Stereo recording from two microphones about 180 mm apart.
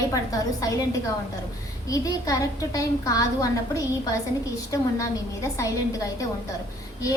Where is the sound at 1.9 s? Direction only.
20° left (ahead or behind).